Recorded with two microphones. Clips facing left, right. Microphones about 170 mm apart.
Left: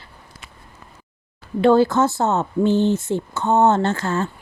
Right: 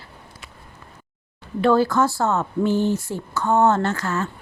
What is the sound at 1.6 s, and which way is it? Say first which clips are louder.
Speech: left 3 dB; 25° left (ahead or behind).